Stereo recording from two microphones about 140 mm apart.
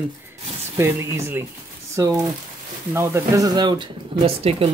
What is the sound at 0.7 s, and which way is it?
Speech, 20° right (ahead or behind).